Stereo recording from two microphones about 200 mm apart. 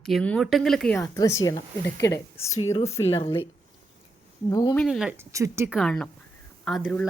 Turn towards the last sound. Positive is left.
turn(degrees=0)  # may be behind; listen again after turning